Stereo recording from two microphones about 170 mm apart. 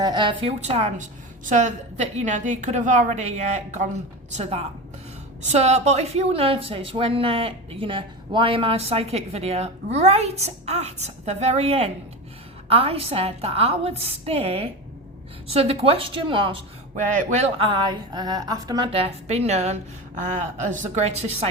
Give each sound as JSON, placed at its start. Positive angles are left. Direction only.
{"t": 0.0, "sound": "a woman's voice", "side_deg": -25}
{"t": 5.4, "sound": "a woman's voice", "side_deg": -40}
{"t": 18.9, "sound": "a woman's voice", "side_deg": -35}